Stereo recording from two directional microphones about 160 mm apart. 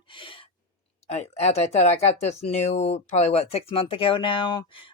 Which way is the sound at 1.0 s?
45° left (ahead or behind).